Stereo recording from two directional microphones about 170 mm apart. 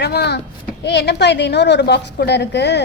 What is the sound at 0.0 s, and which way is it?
A woman's voice, 75° left (ahead or behind).